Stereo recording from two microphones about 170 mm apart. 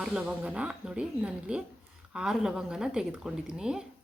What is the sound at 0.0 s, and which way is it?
Speech, 5° right (ahead or behind).